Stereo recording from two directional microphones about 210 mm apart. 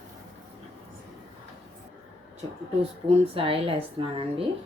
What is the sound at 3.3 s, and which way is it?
Speech, 25° right (ahead or behind).